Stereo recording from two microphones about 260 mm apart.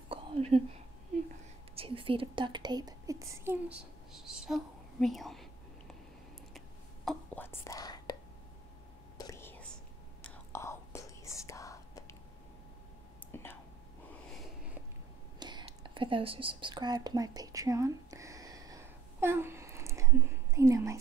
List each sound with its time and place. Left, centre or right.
0.1 s whispering: right
1.8 s speech: centre
7.1 s whispering: centre
9.2 s whispering: centre
13.3 s whispering: centre
15.3 s whispering: centre